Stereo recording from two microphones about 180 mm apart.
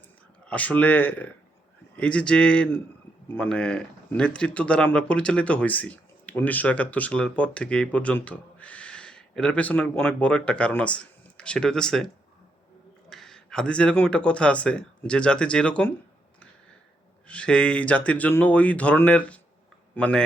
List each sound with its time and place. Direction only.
0.4 s speech: 10° left (ahead or behind)
17.2 s a man's voice: 5° left (ahead or behind)